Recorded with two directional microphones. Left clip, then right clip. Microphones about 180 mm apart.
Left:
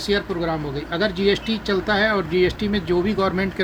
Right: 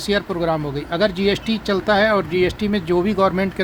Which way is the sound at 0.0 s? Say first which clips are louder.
Right 2 dB; 55° right (ahead or behind).